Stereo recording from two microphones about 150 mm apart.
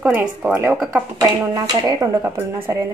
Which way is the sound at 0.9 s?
25° right (ahead or behind).